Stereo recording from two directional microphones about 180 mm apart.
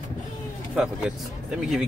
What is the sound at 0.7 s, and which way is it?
Speech, 5° right (ahead or behind).